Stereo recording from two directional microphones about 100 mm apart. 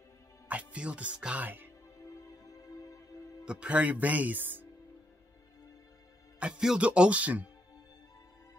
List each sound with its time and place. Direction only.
0.5 s speech: 15° right (ahead or behind)
2.7 s music: 35° left (ahead or behind)
3.4 s speech: 10° right (ahead or behind)
6.4 s speech: 10° right (ahead or behind)